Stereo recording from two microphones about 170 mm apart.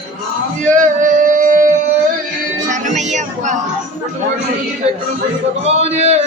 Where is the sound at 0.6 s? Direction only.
50° right (ahead or behind).